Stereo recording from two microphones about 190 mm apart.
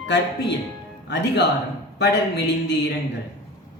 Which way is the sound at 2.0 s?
65° left (ahead or behind).